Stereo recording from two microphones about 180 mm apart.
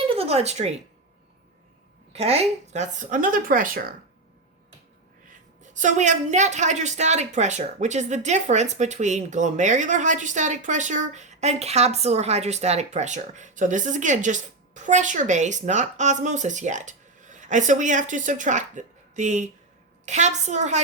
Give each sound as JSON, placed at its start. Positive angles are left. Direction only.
{"t": 0.1, "sound": "speech", "side_deg": -35}
{"t": 2.1, "sound": "speech", "side_deg": -35}
{"t": 5.7, "sound": "a woman's voice", "side_deg": -45}